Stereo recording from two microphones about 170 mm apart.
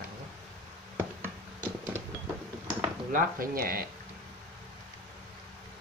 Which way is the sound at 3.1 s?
55° right (ahead or behind).